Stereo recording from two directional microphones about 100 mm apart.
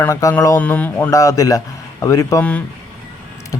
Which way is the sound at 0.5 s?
15° left (ahead or behind).